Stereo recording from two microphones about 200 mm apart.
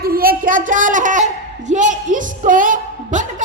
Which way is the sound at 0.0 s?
45° right (ahead or behind).